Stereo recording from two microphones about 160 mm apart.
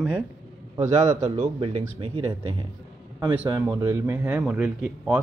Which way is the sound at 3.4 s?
20° right (ahead or behind).